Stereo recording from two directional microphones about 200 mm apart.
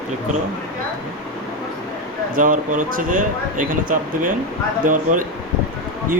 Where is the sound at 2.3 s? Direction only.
40° right (ahead or behind).